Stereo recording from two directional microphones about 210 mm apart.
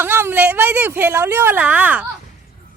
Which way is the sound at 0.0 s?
10° right (ahead or behind).